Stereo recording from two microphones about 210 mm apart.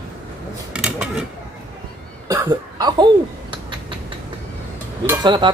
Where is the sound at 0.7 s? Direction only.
5° right (ahead or behind).